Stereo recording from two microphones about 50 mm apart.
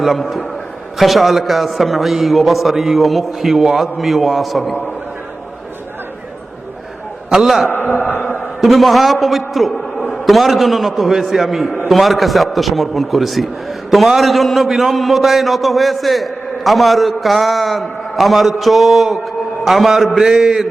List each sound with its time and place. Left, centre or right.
0.0 s a man's voice: centre
7.3 s a man's voice: centre
7.7 s a man's voice: left
8.0 s a sound: left
8.6 s a man's voice: centre